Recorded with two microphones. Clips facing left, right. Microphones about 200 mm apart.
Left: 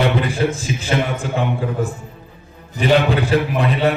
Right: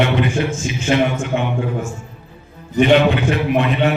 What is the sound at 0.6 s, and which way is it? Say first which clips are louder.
Speech: right 4 dB; 35° left (ahead or behind).